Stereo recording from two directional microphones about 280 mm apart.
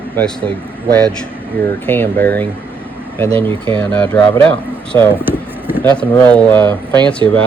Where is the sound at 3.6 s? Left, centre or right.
Centre.